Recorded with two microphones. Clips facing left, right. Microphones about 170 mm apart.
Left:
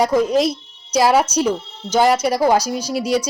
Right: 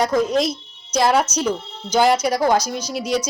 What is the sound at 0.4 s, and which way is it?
Music, 30° left (ahead or behind).